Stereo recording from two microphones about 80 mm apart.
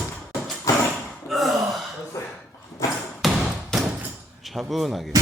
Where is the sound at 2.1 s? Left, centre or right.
Left.